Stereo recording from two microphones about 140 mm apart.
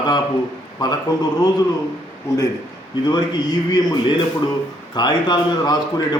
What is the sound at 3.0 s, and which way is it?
A man's voice, 30° left (ahead or behind).